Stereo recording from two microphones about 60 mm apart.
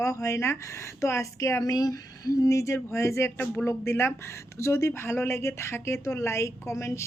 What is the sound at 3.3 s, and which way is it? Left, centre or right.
A woman's voice, left.